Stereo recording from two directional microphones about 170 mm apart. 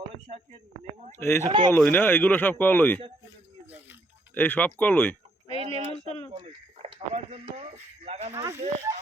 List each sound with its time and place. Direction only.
1.2 s speech: 15° left (ahead or behind)
1.5 s speech: 30° right (ahead or behind)
1.7 s speech: 10° left (ahead or behind)
3.7 s a sound: 10° right (ahead or behind)
4.4 s speech: 10° left (ahead or behind)
5.5 s speech: 30° right (ahead or behind)
8.3 s speech: 15° right (ahead or behind)